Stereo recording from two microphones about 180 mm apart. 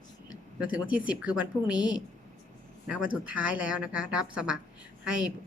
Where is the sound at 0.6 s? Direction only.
5° right (ahead or behind).